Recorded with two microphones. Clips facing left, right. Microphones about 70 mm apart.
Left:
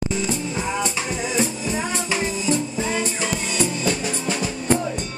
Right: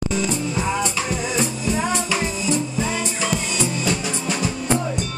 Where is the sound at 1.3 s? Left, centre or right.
Left.